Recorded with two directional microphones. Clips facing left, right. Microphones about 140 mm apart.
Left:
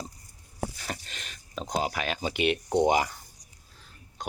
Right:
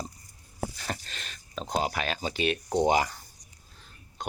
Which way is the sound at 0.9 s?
10° left (ahead or behind).